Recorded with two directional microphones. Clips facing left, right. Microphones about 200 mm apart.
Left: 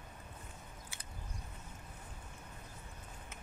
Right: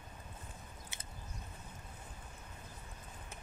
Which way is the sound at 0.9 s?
20° right (ahead or behind).